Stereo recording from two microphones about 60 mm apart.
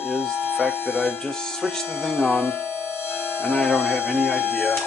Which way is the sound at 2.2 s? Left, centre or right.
Left.